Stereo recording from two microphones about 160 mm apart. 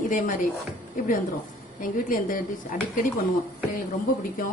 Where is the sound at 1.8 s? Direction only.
55° left (ahead or behind).